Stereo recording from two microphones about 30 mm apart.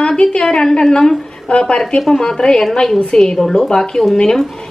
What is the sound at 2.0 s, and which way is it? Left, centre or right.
A woman's voice, centre.